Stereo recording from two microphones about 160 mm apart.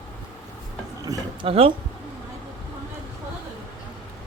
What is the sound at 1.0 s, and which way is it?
Speech, 25° right (ahead or behind).